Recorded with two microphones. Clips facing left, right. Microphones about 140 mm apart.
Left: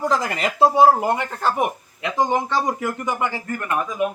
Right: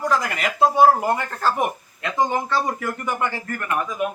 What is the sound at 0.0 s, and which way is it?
Speech, 25° left (ahead or behind).